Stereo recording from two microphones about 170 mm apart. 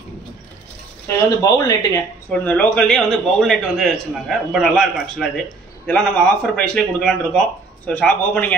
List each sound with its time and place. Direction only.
1.0 s speech: 20° left (ahead or behind)
2.4 s a man's voice: 10° left (ahead or behind)